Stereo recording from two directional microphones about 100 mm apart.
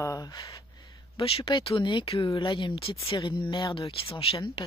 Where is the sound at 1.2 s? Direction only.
65° left (ahead or behind).